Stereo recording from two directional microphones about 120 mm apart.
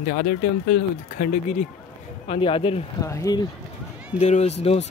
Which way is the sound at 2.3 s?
50° left (ahead or behind).